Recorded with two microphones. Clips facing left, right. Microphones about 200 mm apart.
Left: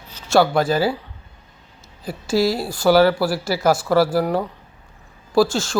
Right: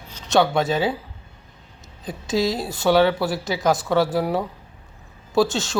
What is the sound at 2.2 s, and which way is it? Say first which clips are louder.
Speech: left 3 dB; 20° right (ahead or behind).